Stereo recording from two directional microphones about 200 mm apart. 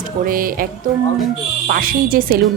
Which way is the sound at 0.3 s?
45° right (ahead or behind).